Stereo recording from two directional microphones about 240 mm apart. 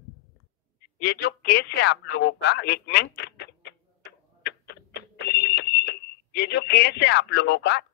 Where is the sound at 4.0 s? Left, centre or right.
Left.